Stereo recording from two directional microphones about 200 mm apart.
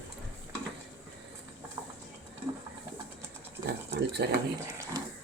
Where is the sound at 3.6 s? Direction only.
55° right (ahead or behind).